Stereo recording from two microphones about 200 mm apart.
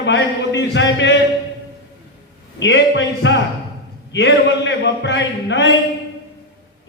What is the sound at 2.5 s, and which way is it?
A man's voice, 65° left (ahead or behind).